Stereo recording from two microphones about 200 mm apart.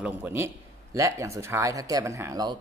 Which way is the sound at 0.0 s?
10° right (ahead or behind).